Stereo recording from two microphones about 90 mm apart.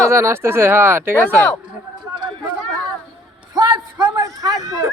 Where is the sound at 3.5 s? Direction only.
50° right (ahead or behind).